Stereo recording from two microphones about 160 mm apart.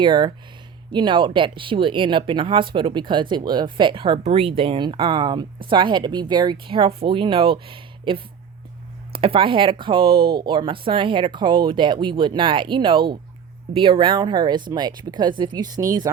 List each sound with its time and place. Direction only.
0.0 s speech: 30° right (ahead or behind)